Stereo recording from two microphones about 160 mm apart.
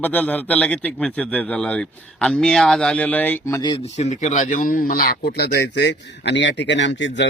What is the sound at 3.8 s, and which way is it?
Speech, 45° left (ahead or behind).